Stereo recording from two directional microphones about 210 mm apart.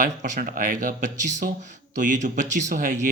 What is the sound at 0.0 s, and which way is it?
Speech, 40° right (ahead or behind).